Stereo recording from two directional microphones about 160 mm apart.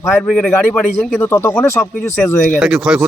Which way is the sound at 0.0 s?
Centre (ahead or behind).